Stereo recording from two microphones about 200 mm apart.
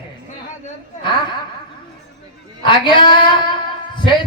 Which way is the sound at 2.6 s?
25° left (ahead or behind).